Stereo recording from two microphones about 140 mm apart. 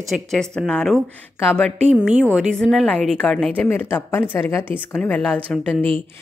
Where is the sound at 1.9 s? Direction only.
10° right (ahead or behind).